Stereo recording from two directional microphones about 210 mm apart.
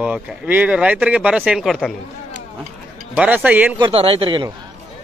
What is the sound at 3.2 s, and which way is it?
Speech, 5° right (ahead or behind).